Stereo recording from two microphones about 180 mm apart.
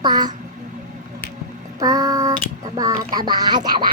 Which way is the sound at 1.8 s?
20° right (ahead or behind).